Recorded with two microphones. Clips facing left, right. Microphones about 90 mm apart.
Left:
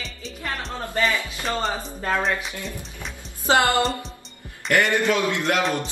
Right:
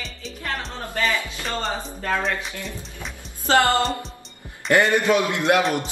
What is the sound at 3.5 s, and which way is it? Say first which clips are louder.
Speech: right 1 dB; 15° left (ahead or behind).